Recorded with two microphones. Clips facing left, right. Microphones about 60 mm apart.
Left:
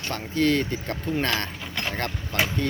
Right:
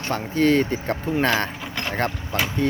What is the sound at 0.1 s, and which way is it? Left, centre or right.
Speech, right.